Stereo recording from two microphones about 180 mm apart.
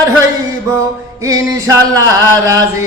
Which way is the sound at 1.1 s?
15° right (ahead or behind).